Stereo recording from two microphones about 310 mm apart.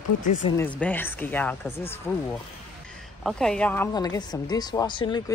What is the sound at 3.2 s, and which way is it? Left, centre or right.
Speech, centre.